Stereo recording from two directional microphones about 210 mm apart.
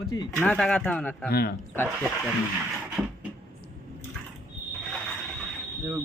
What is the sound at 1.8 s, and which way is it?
Speech, centre (ahead or behind).